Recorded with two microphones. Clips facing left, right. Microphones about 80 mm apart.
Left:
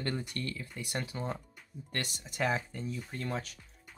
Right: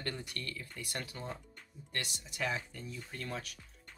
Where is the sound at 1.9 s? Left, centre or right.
Left.